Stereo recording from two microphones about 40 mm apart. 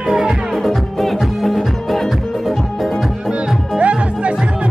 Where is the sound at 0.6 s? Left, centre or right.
Centre.